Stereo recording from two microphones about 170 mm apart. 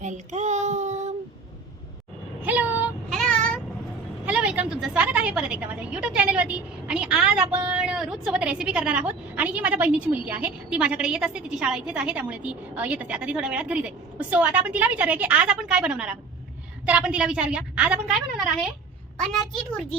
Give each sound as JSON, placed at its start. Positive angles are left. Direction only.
{"t": 0.0, "sound": "child singing", "side_deg": -45}
{"t": 2.4, "sound": "vehicle", "side_deg": -10}
{"t": 3.1, "sound": "child singing", "side_deg": 5}
{"t": 4.3, "sound": "a woman's voice", "side_deg": -5}